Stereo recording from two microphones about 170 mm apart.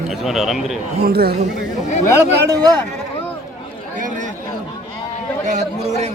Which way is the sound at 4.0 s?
50° right (ahead or behind).